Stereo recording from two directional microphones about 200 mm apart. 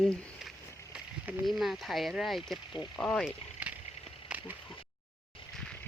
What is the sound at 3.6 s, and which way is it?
Rowboat, 10° right (ahead or behind).